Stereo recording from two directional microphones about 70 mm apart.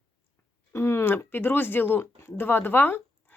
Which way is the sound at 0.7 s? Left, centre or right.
Left.